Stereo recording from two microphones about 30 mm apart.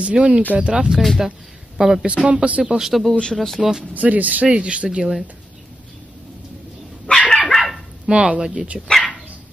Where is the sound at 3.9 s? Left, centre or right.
Right.